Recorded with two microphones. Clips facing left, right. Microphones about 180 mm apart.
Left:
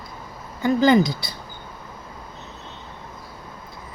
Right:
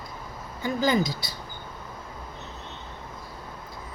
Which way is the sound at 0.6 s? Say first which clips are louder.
Left 8 dB; 65° left (ahead or behind).